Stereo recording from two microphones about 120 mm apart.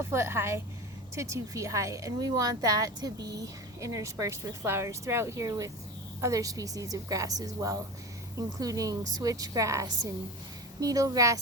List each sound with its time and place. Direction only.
0.0 s speech: 20° right (ahead or behind)